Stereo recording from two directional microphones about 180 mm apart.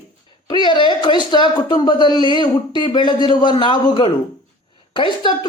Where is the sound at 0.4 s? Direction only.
25° left (ahead or behind).